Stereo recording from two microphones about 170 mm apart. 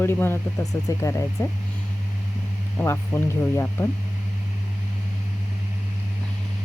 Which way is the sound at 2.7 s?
10° left (ahead or behind).